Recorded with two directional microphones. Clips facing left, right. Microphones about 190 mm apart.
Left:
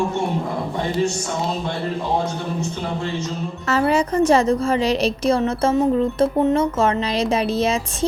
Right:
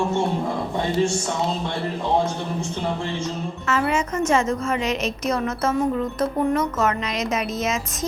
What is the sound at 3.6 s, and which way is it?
A woman's voice, 35° left (ahead or behind).